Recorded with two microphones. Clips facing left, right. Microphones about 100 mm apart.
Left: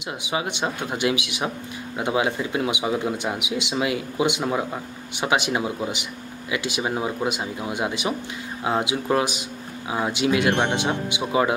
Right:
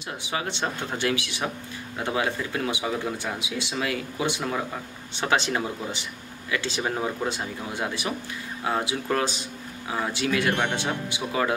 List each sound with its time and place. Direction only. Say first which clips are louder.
0.2 s speech: left 3 dB; 15° left (ahead or behind)